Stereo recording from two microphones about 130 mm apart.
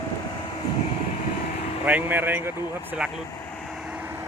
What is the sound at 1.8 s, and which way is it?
Speech, 15° right (ahead or behind).